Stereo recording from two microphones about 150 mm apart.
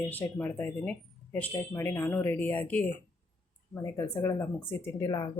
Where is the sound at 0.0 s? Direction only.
10° left (ahead or behind).